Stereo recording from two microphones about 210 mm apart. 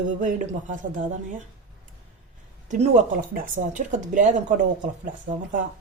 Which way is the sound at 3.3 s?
35° right (ahead or behind).